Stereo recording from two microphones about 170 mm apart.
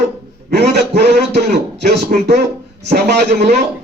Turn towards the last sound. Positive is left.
turn(degrees=-80)